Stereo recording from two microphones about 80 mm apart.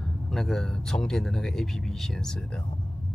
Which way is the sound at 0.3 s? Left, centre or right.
Centre.